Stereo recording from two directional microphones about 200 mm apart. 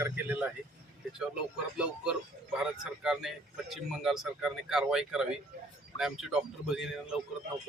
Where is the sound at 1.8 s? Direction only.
5° right (ahead or behind).